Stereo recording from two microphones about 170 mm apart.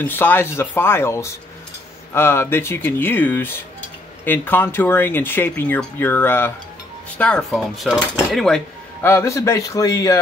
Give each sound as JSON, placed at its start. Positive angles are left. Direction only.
{"t": 0.0, "sound": "speech", "side_deg": 10}
{"t": 9.1, "sound": "a man's voice", "side_deg": 15}